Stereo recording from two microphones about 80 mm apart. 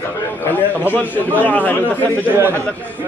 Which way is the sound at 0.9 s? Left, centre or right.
Left.